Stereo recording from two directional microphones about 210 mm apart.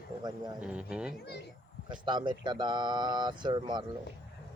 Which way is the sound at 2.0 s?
20° right (ahead or behind).